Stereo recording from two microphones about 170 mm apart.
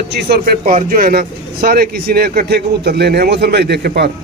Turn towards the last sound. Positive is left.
turn(degrees=-80)